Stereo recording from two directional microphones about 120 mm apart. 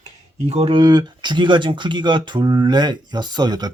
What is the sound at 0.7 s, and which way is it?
Speech, 35° right (ahead or behind).